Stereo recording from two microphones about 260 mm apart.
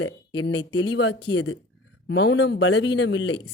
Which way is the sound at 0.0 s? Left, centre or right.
Left.